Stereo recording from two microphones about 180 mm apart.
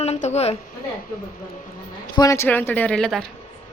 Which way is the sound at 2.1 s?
20° left (ahead or behind).